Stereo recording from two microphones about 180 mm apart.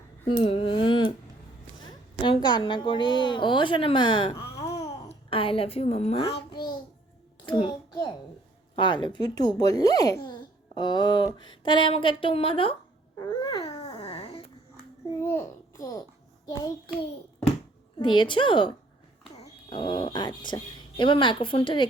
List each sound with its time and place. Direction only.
0.3 s a sound: 30° left (ahead or behind)
2.2 s a woman's voice: 25° left (ahead or behind)
4.7 s babbling: 30° left (ahead or behind)
7.4 s a child's voice: 30° left (ahead or behind)
13.1 s dog: 25° left (ahead or behind)
15.2 s babbling: 15° left (ahead or behind)
16.6 s a woman's voice: 20° left (ahead or behind)
18.0 s a woman's voice: 25° left (ahead or behind)